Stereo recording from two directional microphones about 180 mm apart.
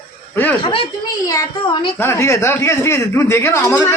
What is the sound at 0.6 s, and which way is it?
Speech, 30° left (ahead or behind).